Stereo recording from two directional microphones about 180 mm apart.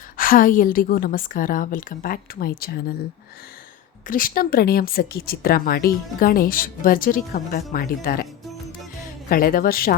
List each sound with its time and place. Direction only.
0.2 s speech: 50° left (ahead or behind)
4.1 s speech: 55° left (ahead or behind)
9.3 s speech: 50° left (ahead or behind)